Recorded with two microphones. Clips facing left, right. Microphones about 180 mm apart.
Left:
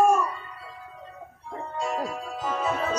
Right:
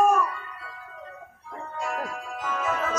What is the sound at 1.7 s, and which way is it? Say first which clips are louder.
Music: left 2 dB; 30° left (ahead or behind).